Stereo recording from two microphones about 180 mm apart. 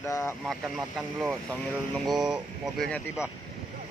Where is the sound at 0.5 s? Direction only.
5° right (ahead or behind).